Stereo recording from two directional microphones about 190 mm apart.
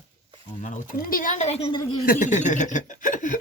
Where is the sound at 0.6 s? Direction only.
40° left (ahead or behind).